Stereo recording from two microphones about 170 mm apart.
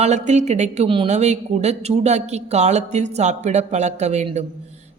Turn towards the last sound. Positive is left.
turn(degrees=-40)  # may be behind; listen again after turning